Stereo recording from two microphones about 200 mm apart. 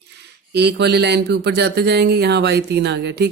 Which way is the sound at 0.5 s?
55° right (ahead or behind).